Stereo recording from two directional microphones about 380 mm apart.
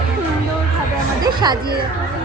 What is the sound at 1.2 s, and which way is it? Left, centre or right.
Speech, centre.